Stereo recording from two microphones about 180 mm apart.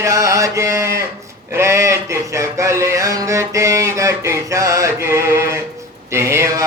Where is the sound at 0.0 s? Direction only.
15° right (ahead or behind).